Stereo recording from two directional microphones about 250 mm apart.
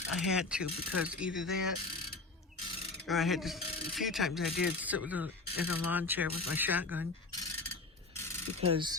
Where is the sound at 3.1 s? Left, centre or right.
Centre.